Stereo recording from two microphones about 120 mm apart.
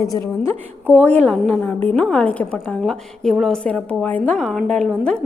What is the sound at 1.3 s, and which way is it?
Speech, centre (ahead or behind).